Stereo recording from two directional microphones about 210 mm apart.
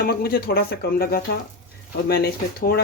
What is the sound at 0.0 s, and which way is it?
Speech, 45° left (ahead or behind).